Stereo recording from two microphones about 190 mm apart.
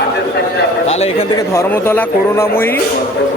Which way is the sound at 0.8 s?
35° left (ahead or behind).